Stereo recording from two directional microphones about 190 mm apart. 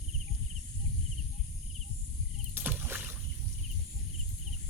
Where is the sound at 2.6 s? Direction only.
10° right (ahead or behind).